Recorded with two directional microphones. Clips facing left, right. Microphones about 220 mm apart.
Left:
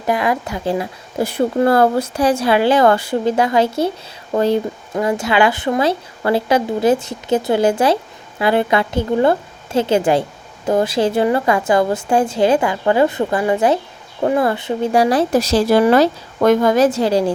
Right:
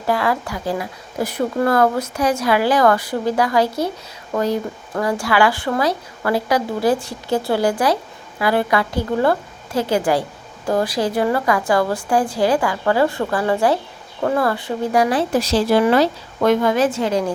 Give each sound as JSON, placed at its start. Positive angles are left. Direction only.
{"t": 0.0, "sound": "speech", "side_deg": 20}